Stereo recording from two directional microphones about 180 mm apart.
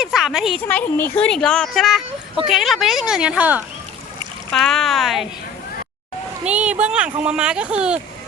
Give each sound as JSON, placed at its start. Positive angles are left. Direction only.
{"t": 0.0, "sound": "a woman's voice", "side_deg": 0}
{"t": 4.5, "sound": "a woman's voice", "side_deg": 0}
{"t": 6.4, "sound": "speech", "side_deg": -5}